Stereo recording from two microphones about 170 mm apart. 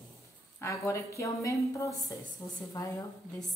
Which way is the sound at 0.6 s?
15° left (ahead or behind).